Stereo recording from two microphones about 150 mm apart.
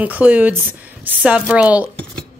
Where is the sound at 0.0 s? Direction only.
10° right (ahead or behind).